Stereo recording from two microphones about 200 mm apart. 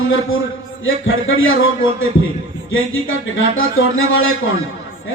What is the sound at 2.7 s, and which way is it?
A man's voice, 85° left.